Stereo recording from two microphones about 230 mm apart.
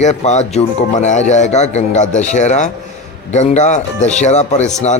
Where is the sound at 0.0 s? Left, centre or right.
Left.